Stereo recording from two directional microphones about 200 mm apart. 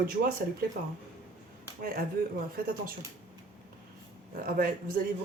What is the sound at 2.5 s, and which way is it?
Speech, 45° right (ahead or behind).